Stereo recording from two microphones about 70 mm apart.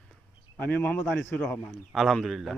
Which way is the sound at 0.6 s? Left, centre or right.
Left.